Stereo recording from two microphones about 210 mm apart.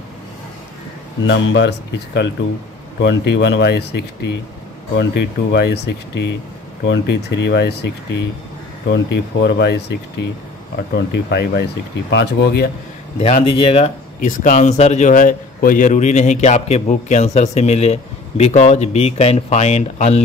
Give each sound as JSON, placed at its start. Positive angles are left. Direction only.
{"t": 1.2, "sound": "speech", "side_deg": 60}
{"t": 11.0, "sound": "speech", "side_deg": 55}
{"t": 13.2, "sound": "speech", "side_deg": 25}
{"t": 14.2, "sound": "a man's voice", "side_deg": 35}